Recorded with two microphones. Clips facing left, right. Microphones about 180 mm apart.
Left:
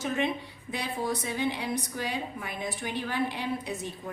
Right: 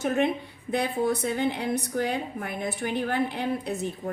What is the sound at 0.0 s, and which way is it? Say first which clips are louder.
A woman's voice: right 5 dB; 60° right (ahead or behind).